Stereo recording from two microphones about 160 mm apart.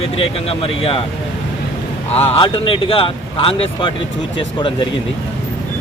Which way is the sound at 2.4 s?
35° left (ahead or behind).